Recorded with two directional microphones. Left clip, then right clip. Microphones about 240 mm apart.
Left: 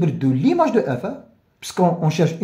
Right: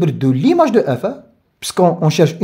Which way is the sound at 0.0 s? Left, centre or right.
Right.